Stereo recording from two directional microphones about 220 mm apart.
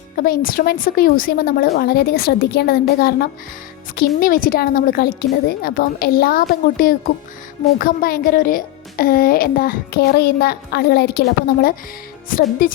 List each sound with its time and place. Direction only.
0.2 s a child's voice: 40° left (ahead or behind)
12.3 s a woman's voice: 40° left (ahead or behind)